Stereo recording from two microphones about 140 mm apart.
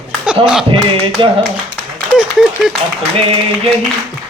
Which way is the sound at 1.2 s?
35° right (ahead or behind).